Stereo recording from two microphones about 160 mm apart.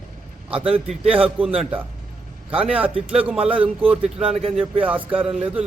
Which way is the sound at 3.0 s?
5° right (ahead or behind).